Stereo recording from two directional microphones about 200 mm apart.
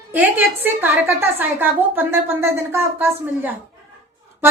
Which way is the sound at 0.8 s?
10° right (ahead or behind).